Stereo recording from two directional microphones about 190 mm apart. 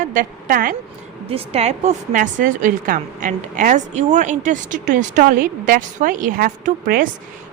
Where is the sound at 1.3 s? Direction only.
30° right (ahead or behind).